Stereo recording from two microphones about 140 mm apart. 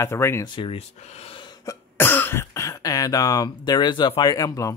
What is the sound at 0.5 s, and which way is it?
Speech, 45° left (ahead or behind).